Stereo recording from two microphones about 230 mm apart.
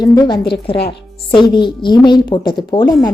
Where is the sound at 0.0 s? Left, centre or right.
Centre.